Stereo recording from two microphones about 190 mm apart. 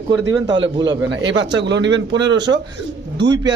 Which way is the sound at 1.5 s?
65° right (ahead or behind).